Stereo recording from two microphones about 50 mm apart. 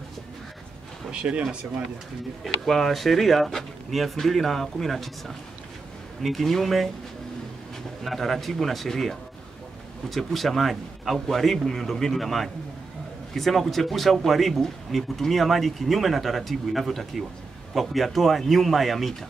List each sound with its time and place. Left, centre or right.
1.1 s speech: right
2.4 s speech: centre
6.2 s speech: centre
8.0 s speech: centre